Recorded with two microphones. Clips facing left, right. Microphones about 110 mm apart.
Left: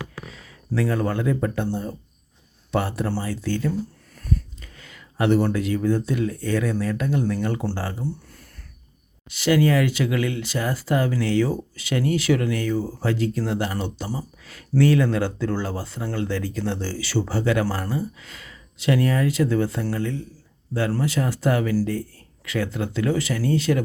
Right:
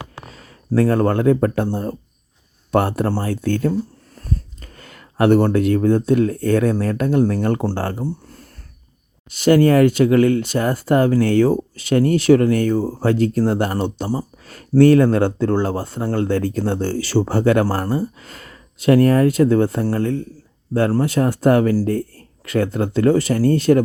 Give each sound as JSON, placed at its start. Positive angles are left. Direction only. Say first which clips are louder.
{"t": 0.3, "sound": "speech", "louder": "right 7 dB", "side_deg": -45}
{"t": 4.1, "sound": "speech", "louder": "left 2 dB", "side_deg": -35}